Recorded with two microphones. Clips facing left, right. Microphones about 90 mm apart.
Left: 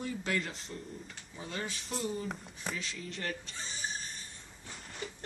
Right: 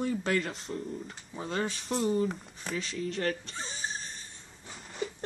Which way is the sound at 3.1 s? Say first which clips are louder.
Right 6 dB; 45° right (ahead or behind).